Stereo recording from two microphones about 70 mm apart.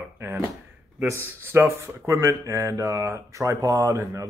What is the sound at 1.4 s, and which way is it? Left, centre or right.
Speech, right.